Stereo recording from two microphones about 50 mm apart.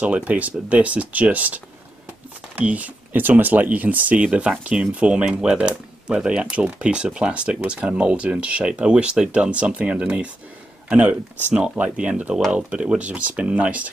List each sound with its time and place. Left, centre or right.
0.0 s speech: right